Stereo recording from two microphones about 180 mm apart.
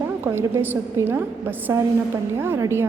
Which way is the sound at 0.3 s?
10° right (ahead or behind).